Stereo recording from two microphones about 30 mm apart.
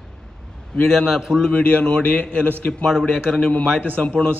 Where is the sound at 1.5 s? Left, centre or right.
Left.